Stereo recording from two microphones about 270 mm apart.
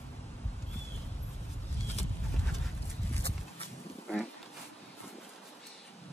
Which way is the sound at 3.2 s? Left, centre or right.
Left.